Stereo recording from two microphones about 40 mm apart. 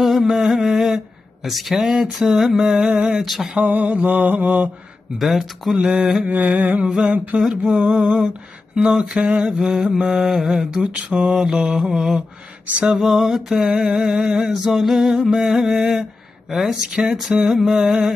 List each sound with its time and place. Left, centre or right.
0.0 s carnatic music: centre
0.5 s a sound: centre
1.8 s mantra: centre
3.5 s mantra: right
5.2 s mantra: centre
5.9 s mantra: centre
6.3 s mantra: right
7.3 s mantra: centre
9.4 s mantra: centre
10.7 s mantra: right
11.2 s mantra: centre
16.0 s a sound: centre
17.1 s mantra: centre